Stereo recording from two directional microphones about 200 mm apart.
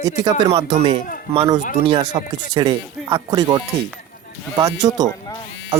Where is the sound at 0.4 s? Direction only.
30° right (ahead or behind).